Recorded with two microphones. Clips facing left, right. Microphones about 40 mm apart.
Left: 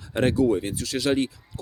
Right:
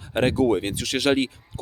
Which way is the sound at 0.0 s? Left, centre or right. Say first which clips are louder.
Right 1 dB; right.